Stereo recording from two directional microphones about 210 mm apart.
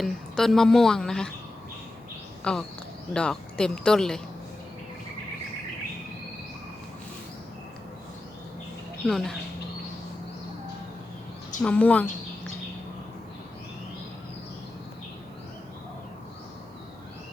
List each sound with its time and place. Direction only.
0.0 s a woman's voice: centre (ahead or behind)
2.4 s a woman's voice: 5° left (ahead or behind)
9.0 s a woman's voice: centre (ahead or behind)
11.6 s a woman's voice: 5° left (ahead or behind)